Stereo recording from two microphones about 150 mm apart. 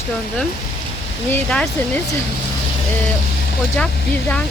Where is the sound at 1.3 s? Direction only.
10° left (ahead or behind).